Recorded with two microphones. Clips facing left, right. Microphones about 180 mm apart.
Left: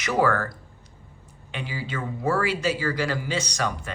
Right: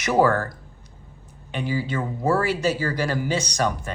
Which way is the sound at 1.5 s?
45° right (ahead or behind).